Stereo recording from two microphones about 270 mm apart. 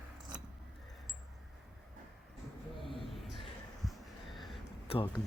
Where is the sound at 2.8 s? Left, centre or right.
Centre.